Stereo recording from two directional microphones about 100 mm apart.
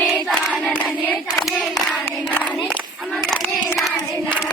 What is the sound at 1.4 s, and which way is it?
Hands, centre (ahead or behind).